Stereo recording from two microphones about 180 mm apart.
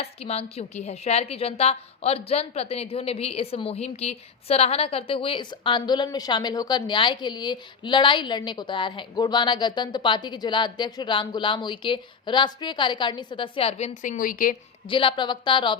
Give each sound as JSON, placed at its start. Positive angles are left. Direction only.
{"t": 0.0, "sound": "a woman's voice", "side_deg": 35}
{"t": 14.8, "sound": "a woman's voice", "side_deg": 30}